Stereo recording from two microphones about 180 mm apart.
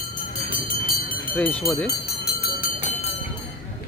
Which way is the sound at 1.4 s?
10° left (ahead or behind).